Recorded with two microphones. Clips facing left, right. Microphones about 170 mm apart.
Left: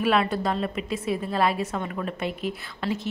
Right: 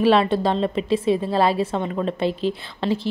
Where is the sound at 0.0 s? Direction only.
30° right (ahead or behind).